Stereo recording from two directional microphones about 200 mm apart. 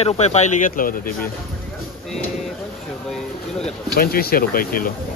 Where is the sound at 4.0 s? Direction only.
50° left (ahead or behind).